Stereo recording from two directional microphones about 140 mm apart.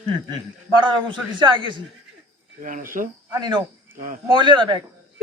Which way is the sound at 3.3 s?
30° right (ahead or behind).